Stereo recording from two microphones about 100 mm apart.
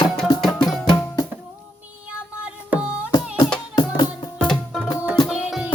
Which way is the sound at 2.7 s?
15° right (ahead or behind).